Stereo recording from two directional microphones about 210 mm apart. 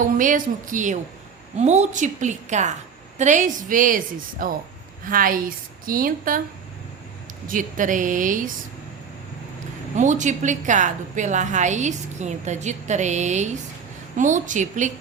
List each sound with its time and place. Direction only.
0.0 s a woman's voice: 40° right (ahead or behind)
7.4 s a woman's voice: 40° right (ahead or behind)
9.9 s a woman's voice: 35° right (ahead or behind)